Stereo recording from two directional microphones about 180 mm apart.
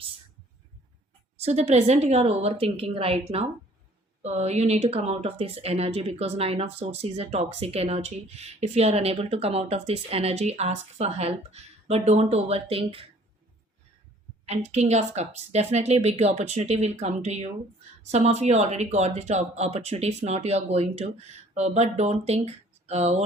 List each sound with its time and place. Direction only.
1.4 s speech: 35° right (ahead or behind)
14.4 s speech: 35° right (ahead or behind)